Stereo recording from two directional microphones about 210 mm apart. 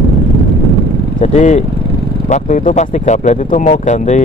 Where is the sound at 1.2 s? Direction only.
35° left (ahead or behind).